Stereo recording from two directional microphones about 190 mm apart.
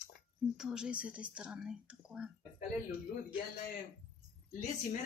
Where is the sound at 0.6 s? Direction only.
5° right (ahead or behind).